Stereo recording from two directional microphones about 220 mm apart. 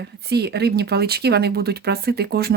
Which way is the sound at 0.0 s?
50° right (ahead or behind).